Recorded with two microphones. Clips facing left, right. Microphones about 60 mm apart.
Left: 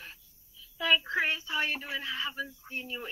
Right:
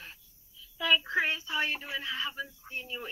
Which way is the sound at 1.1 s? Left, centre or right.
Left.